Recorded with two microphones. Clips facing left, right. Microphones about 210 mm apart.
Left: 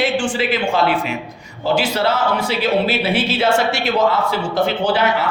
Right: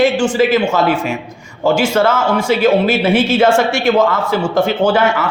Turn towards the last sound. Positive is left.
turn(degrees=-45)  # may be behind; listen again after turning